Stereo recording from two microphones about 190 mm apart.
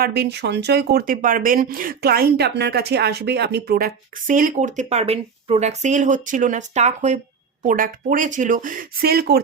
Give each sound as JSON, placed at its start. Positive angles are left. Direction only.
{"t": 0.0, "sound": "speech", "side_deg": -60}